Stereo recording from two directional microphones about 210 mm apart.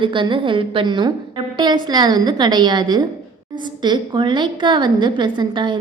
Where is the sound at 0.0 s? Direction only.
25° right (ahead or behind).